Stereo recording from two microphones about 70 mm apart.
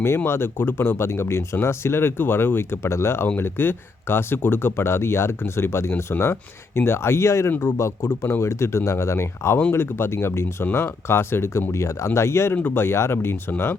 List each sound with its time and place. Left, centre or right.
0.3 s speech: left
12.5 s speech: left